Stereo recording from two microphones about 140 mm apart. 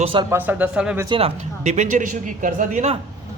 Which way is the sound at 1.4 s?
60° right (ahead or behind).